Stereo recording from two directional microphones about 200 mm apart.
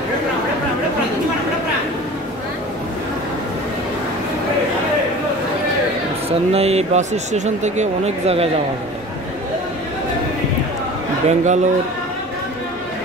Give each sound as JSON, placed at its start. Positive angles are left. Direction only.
{"t": 6.5, "sound": "speech", "side_deg": -30}
{"t": 11.2, "sound": "speech", "side_deg": -35}